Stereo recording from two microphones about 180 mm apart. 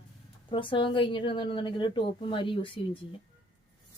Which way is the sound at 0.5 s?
30° left (ahead or behind).